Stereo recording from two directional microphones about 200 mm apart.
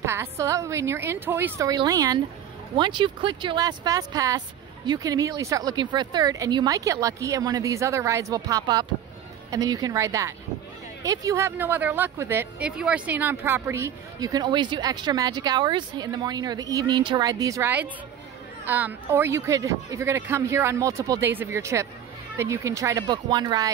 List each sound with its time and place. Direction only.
0.0 s speech: 15° right (ahead or behind)